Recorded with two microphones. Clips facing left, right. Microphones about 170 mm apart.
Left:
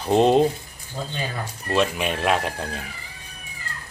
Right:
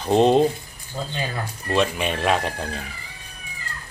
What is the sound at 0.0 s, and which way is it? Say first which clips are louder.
Speech: right 1 dB; 5° left (ahead or behind).